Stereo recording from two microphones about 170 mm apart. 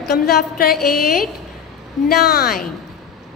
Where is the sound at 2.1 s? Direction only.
65° left (ahead or behind).